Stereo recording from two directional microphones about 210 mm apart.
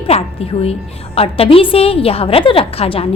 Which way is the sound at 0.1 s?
30° left (ahead or behind).